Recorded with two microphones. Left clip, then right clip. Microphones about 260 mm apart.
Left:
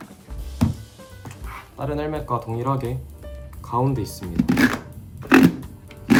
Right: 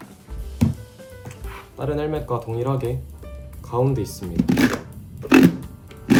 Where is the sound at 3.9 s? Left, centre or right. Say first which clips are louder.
Right 2 dB; left.